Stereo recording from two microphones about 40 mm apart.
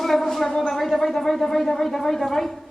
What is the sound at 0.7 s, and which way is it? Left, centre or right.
A woman's voice, centre.